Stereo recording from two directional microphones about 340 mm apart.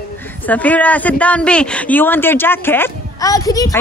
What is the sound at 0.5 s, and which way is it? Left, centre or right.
A man's voice, centre.